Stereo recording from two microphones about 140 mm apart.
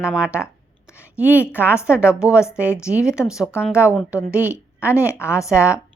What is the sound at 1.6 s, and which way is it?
A woman's voice, 20° left (ahead or behind).